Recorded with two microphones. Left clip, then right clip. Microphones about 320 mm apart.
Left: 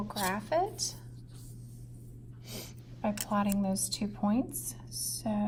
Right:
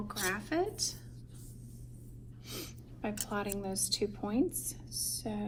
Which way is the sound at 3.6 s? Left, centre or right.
Left.